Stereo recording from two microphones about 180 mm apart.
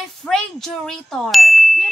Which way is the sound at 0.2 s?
5° left (ahead or behind).